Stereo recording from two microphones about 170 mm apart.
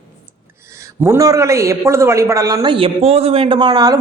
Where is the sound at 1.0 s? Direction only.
20° right (ahead or behind).